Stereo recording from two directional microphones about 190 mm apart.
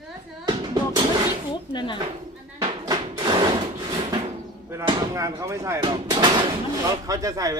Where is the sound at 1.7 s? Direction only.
25° left (ahead or behind).